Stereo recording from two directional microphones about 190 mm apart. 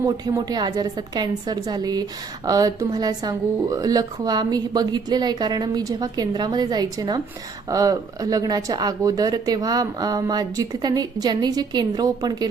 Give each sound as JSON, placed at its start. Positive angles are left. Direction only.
{"t": 0.0, "sound": "a woman's voice", "side_deg": -20}